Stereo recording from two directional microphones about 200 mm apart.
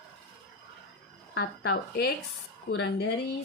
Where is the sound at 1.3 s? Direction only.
50° left (ahead or behind).